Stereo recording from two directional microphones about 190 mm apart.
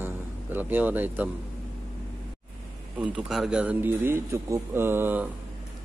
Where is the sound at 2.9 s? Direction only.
5° right (ahead or behind).